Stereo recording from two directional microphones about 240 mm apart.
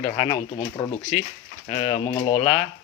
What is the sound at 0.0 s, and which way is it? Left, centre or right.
Speech, left.